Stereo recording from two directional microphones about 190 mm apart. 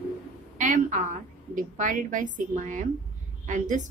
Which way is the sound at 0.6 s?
40° right (ahead or behind).